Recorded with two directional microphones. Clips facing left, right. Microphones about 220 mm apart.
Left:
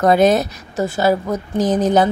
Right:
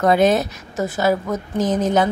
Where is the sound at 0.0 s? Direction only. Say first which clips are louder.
Left 2 dB; 40° left (ahead or behind).